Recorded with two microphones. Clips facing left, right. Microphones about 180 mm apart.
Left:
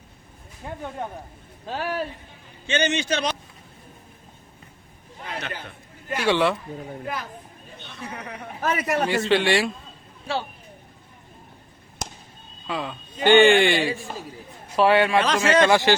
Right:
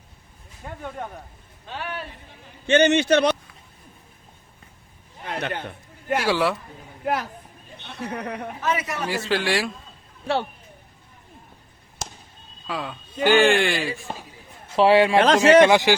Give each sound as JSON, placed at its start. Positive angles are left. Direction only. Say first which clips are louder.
{"t": 1.6, "sound": "speech", "louder": "left 5 dB", "side_deg": 40}
{"t": 2.6, "sound": "a man's voice", "louder": "right 7 dB", "side_deg": -60}
{"t": 5.2, "sound": "a sound", "louder": "right 5 dB", "side_deg": -55}
{"t": 6.2, "sound": "a man's voice", "louder": "left 3 dB", "side_deg": 0}
{"t": 7.0, "sound": "speech", "louder": "right 6 dB", "side_deg": -65}
{"t": 8.6, "sound": "a man's voice", "louder": "left 4 dB", "side_deg": 50}
{"t": 9.0, "sound": "a man's voice", "louder": "left 2 dB", "side_deg": 0}
{"t": 12.6, "sound": "a man's voice", "louder": "left 1 dB", "side_deg": 0}
{"t": 14.8, "sound": "a man's voice", "louder": "right 2 dB", "side_deg": -25}